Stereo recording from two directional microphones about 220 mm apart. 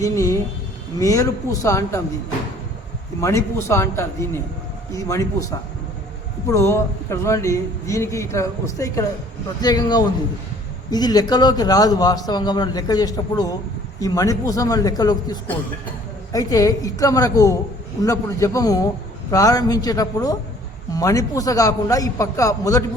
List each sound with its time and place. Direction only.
0.0 s a man's voice: 15° left (ahead or behind)
3.2 s a man's voice: 15° left (ahead or behind)